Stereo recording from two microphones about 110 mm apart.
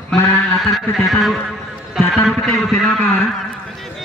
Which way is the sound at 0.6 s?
Centre (ahead or behind).